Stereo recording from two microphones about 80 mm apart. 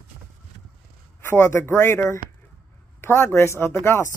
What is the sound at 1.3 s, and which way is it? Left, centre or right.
Speech, left.